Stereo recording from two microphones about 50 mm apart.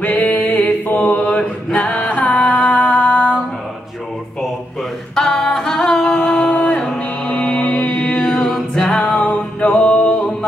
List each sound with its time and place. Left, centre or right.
0.0 s a sound: left
0.8 s mantra: left
1.8 s music: left
5.1 s a sound: centre
6.5 s music: left
7.0 s mantra: left
8.3 s a capella: centre
8.7 s music: centre
9.1 s music: left